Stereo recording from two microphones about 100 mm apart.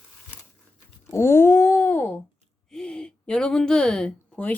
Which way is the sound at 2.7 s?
10° left (ahead or behind).